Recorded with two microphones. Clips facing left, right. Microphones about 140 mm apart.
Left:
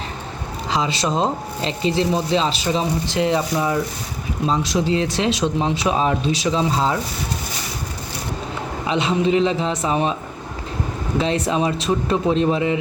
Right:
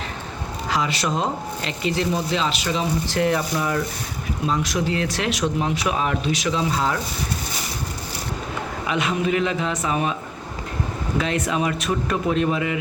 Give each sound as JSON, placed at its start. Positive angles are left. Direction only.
{"t": 0.7, "sound": "speech", "side_deg": 25}
{"t": 3.1, "sound": "speech", "side_deg": 20}
{"t": 8.9, "sound": "speech", "side_deg": 30}
{"t": 11.2, "sound": "speech", "side_deg": 30}